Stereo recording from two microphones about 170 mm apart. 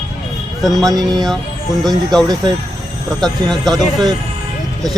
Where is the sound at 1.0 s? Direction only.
25° right (ahead or behind).